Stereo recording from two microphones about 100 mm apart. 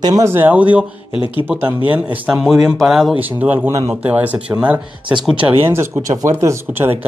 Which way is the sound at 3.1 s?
15° right (ahead or behind).